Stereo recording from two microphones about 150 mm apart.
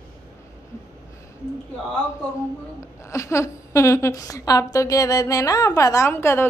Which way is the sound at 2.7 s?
20° left (ahead or behind).